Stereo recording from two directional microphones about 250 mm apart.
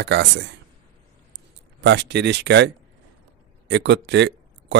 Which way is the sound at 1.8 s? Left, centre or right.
Right.